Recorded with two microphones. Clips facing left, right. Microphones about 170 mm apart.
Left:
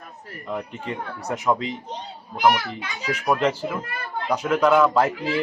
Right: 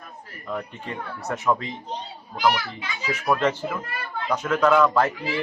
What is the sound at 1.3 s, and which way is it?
Speech, 15° left (ahead or behind).